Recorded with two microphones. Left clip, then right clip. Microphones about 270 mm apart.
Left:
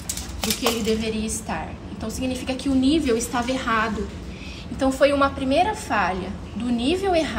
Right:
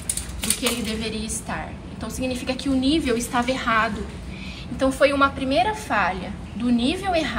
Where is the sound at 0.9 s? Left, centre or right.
Centre.